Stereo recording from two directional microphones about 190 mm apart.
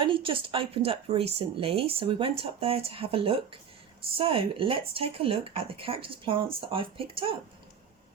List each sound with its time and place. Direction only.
0.0 s speech: 25° right (ahead or behind)